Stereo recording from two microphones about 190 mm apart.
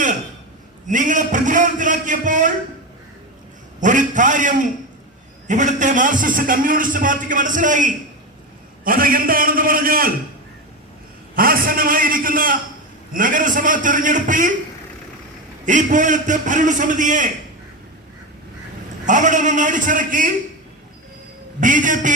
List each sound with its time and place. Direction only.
0.9 s a man's voice: 40° right (ahead or behind)
3.8 s a man's voice: 40° right (ahead or behind)
11.3 s a man's voice: 50° right (ahead or behind)
15.6 s a man's voice: 40° right (ahead or behind)
19.0 s a man's voice: 40° right (ahead or behind)
21.6 s a man's voice: 45° right (ahead or behind)